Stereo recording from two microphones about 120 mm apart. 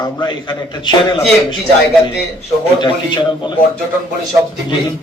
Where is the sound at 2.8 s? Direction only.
40° left (ahead or behind).